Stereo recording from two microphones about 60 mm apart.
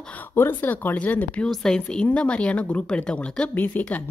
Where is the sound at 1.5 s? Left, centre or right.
Centre; by 4.0 s left.